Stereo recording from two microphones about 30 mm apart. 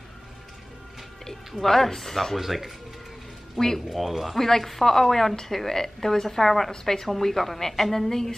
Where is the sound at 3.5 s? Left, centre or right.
Centre.